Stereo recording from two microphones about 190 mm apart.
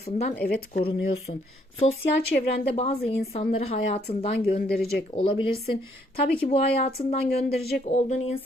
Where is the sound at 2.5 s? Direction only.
30° left (ahead or behind).